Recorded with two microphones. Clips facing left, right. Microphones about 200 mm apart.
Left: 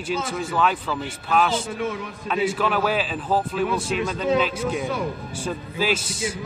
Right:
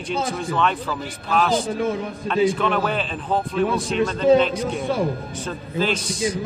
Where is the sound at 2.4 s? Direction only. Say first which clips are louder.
Left 1 dB; 5° left (ahead or behind).